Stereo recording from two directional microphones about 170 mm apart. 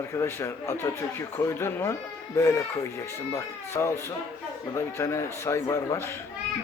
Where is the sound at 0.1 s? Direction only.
15° left (ahead or behind).